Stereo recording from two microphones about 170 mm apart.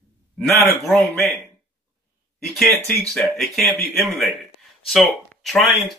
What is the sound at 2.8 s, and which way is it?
Speech, centre (ahead or behind).